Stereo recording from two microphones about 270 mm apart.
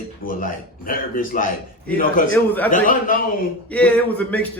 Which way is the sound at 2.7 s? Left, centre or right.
Left.